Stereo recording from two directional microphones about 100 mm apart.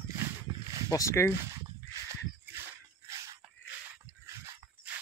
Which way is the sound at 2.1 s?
25° right (ahead or behind).